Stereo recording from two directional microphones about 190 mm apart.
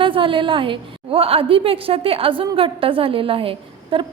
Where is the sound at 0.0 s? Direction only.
25° right (ahead or behind).